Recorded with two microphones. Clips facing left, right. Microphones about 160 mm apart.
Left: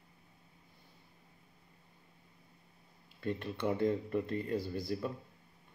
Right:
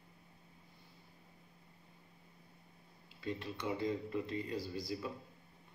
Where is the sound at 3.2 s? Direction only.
55° left (ahead or behind).